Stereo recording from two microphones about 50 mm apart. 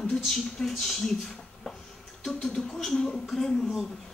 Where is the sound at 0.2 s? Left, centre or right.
Centre.